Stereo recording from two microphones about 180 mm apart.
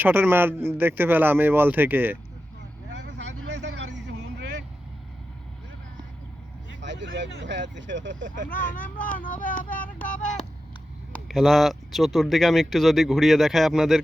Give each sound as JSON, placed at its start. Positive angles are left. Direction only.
{"t": 0.0, "sound": "a man's voice", "side_deg": -10}
{"t": 3.9, "sound": "vehicle", "side_deg": -75}
{"t": 6.7, "sound": "vehicle", "side_deg": -90}
{"t": 7.4, "sound": "speech", "side_deg": -90}
{"t": 8.4, "sound": "speech", "side_deg": 50}
{"t": 11.1, "sound": "speech", "side_deg": 0}